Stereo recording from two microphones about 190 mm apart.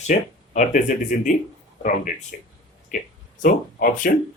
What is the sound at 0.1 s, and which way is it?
Speech, 40° left (ahead or behind).